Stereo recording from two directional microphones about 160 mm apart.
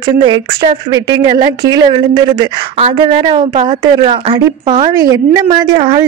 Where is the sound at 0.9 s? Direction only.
25° right (ahead or behind).